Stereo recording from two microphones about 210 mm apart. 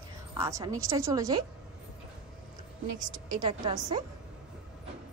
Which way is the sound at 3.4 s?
25° right (ahead or behind).